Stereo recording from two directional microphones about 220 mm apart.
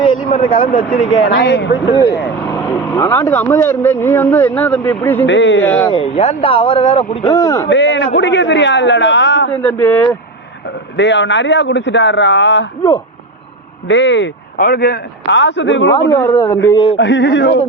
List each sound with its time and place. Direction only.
0.0 s a sound: 25° left (ahead or behind)
0.5 s speech: 40° left (ahead or behind)
1.2 s a man's voice: 50° left (ahead or behind)
1.9 s speech: 15° left (ahead or behind)
5.2 s speech: 55° left (ahead or behind)
5.6 s speech: 10° left (ahead or behind)
5.9 s a man's voice: 25° left (ahead or behind)
7.7 s a man's voice: 55° left (ahead or behind)
9.6 s speech: 10° left (ahead or behind)
10.9 s speech: 55° left (ahead or behind)
13.8 s speech: 55° left (ahead or behind)
16.6 s a man's voice: 20° left (ahead or behind)
17.0 s a man's voice: 55° left (ahead or behind)